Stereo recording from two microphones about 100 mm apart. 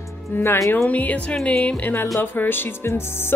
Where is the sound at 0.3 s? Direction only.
25° left (ahead or behind).